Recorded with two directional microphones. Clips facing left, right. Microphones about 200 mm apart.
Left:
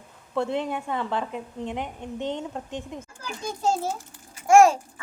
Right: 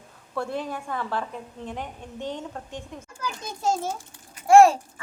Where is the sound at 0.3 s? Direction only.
20° left (ahead or behind).